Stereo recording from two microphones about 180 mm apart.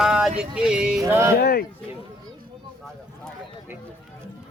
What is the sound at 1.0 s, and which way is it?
Speech, 15° right (ahead or behind).